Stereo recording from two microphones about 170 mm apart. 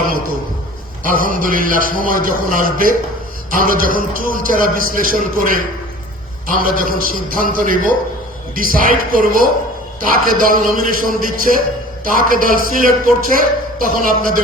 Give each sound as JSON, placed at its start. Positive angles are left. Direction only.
{"t": 1.0, "sound": "a man's voice", "side_deg": -55}